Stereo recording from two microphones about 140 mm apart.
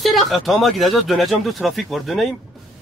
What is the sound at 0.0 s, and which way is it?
Speech, centre (ahead or behind).